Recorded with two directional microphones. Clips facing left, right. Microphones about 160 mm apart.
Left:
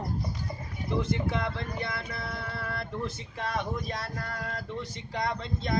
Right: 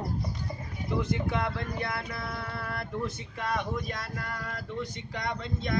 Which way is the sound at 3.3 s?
30° left (ahead or behind).